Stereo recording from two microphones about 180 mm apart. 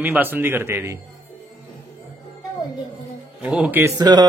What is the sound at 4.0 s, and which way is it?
Speech, 20° right (ahead or behind).